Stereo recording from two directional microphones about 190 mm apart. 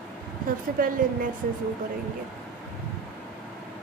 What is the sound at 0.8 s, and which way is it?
Speech, 50° right (ahead or behind).